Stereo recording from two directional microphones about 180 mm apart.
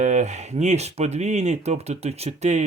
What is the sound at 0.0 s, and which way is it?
Speech, 40° right (ahead or behind).